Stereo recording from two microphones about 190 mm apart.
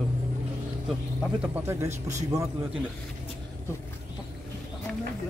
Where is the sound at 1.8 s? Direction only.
40° right (ahead or behind).